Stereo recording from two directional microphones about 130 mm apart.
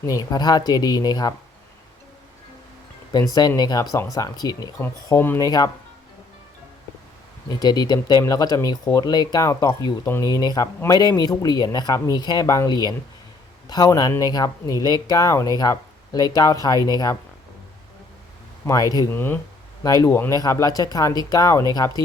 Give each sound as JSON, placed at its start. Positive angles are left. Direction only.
{"t": 0.0, "sound": "speech", "side_deg": 30}
{"t": 3.1, "sound": "speech", "side_deg": 30}
{"t": 4.8, "sound": "speech", "side_deg": 20}
{"t": 5.4, "sound": "speech", "side_deg": 30}
{"t": 7.4, "sound": "speech", "side_deg": 30}
{"t": 18.6, "sound": "speech", "side_deg": 25}